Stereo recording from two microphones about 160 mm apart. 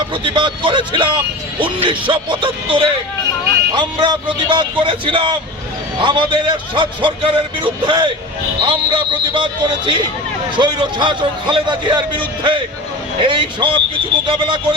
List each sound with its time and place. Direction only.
0.1 s a man's voice: 30° right (ahead or behind)